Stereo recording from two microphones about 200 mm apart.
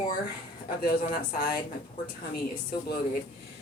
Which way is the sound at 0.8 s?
45° left (ahead or behind).